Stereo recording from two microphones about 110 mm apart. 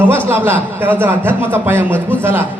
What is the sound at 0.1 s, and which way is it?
A man's voice, 20° right (ahead or behind).